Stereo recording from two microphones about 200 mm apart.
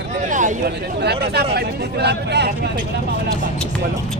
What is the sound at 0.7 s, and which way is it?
Speech, 55° right (ahead or behind).